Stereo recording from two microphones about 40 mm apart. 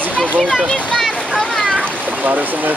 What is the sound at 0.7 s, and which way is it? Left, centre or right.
Speech, left.